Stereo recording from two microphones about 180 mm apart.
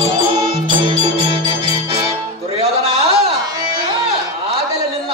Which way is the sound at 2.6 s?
35° right (ahead or behind).